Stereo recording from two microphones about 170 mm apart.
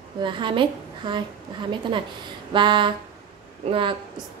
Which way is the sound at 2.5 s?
30° right (ahead or behind).